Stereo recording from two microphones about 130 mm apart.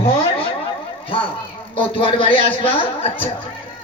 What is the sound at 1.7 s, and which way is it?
A man's voice, 45° left (ahead or behind).